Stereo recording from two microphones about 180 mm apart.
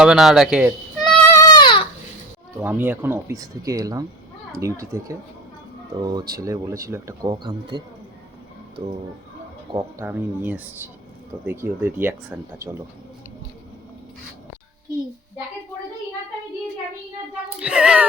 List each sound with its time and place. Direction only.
0.0 s speech: centre (ahead or behind)
1.3 s baby cry: 20° left (ahead or behind)
2.6 s speech: 10° right (ahead or behind)
8.8 s speech: 25° right (ahead or behind)
9.7 s speech: 15° right (ahead or behind)
17.6 s child singing: 5° right (ahead or behind)